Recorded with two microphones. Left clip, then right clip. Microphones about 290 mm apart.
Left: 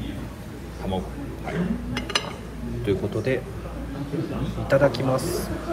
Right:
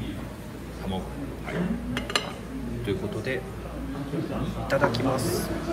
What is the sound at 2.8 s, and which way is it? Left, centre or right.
Speech, centre.